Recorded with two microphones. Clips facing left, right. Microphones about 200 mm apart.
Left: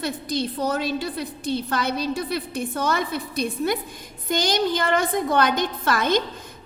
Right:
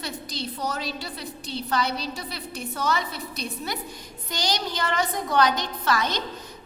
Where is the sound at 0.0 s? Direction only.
55° left (ahead or behind).